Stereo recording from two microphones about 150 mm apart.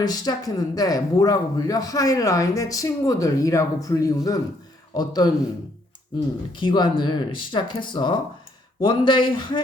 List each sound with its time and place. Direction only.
0.0 s speech: 25° left (ahead or behind)
6.5 s speech: 30° left (ahead or behind)